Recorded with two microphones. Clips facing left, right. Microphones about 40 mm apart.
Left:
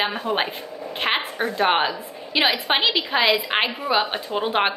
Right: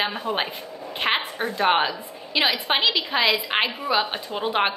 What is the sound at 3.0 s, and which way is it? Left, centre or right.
A woman's voice, centre.